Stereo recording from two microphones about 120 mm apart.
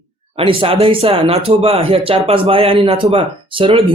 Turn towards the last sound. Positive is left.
turn(degrees=-50)  # may be behind; listen again after turning